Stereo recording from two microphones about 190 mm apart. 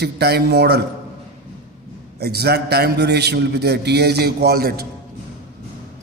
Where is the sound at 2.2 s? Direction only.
55° right (ahead or behind).